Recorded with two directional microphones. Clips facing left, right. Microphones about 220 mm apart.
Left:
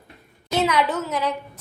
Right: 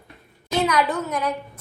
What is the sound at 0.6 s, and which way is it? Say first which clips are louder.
Speech: even; 5° left (ahead or behind).